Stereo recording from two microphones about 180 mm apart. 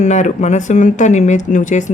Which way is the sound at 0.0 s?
40° left (ahead or behind).